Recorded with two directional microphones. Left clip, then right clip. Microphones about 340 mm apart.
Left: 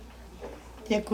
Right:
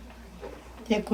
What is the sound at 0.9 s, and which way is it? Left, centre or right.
Speech, centre.